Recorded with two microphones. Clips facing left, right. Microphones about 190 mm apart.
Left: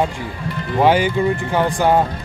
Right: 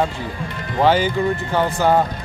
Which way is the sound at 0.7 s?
15° left (ahead or behind).